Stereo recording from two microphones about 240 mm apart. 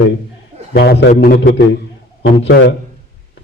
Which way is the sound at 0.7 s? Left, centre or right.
Left.